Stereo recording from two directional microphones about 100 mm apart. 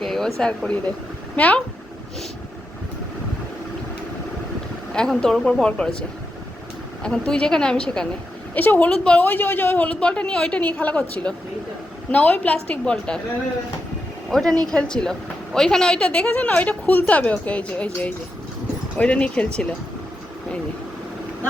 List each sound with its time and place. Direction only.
0.0 s a woman's voice: 5° left (ahead or behind)
4.9 s a woman's voice: 5° left (ahead or behind)
9.2 s a woman's voice: 20° left (ahead or behind)
14.3 s a woman's voice: centre (ahead or behind)